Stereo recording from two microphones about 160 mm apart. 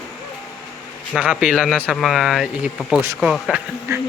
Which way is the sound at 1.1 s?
5° right (ahead or behind).